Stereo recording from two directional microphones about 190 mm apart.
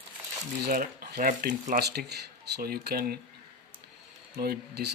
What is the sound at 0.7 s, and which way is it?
Speech, 55° right (ahead or behind).